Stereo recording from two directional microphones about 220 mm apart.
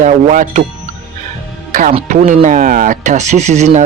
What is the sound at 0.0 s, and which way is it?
Speech, 35° right (ahead or behind).